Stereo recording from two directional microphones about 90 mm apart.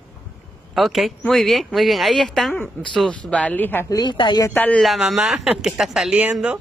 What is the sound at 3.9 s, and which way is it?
Speech, 60° left (ahead or behind).